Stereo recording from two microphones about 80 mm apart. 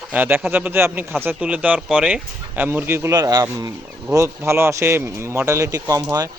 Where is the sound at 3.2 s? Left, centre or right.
Right.